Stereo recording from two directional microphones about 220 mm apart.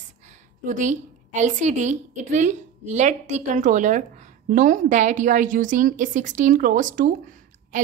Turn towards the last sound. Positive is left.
turn(degrees=-35)  # may be behind; listen again after turning